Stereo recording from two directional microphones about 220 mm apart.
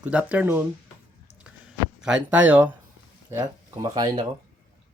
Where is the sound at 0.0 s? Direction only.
5° right (ahead or behind).